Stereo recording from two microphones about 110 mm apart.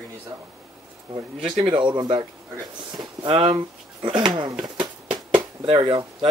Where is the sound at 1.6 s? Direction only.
45° right (ahead or behind).